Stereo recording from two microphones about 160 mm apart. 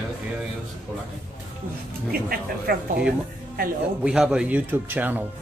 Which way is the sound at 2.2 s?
70° right (ahead or behind).